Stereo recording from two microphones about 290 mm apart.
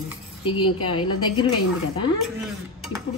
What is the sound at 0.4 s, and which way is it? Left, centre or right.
A woman's voice, centre.